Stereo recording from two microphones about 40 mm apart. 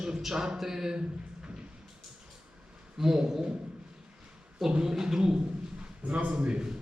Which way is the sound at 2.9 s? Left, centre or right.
Centre.